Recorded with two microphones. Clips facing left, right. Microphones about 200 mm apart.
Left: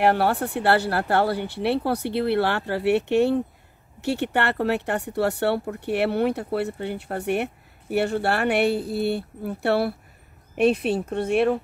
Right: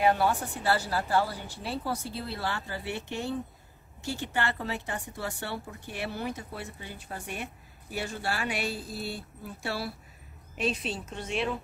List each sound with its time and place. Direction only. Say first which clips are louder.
0.0 s speech: left 5 dB; 65° left (ahead or behind)